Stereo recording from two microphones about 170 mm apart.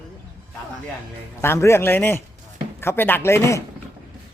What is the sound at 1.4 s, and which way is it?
Speech, 15° left (ahead or behind).